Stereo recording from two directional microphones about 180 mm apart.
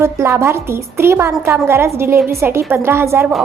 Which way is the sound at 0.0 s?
15° right (ahead or behind).